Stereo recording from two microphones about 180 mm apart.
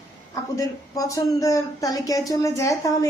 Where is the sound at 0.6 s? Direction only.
20° left (ahead or behind).